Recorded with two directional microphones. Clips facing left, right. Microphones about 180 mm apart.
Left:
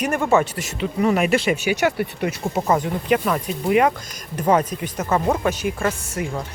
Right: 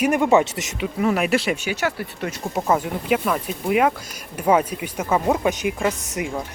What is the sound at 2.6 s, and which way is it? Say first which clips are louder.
Speech: even; 5° right (ahead or behind).